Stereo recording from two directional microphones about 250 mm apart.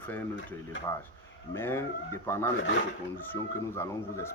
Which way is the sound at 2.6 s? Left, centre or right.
Left.